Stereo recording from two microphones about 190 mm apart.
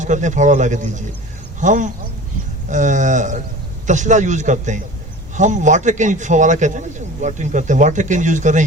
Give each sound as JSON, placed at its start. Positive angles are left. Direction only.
{"t": 0.0, "sound": "a man's voice", "side_deg": -40}